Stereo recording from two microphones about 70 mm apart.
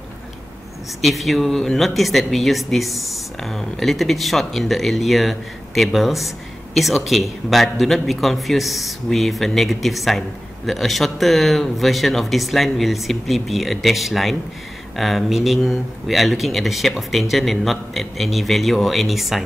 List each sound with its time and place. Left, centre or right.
1.0 s speech: centre